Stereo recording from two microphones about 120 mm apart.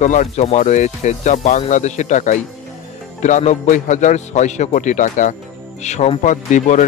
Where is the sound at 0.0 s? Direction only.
90° left.